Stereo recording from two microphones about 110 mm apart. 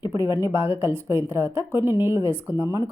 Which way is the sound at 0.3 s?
20° right (ahead or behind).